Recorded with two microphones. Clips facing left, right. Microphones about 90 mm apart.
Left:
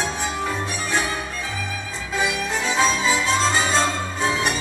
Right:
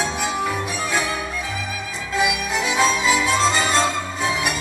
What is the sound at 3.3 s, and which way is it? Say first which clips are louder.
Music: right 1 dB; 15° left (ahead or behind).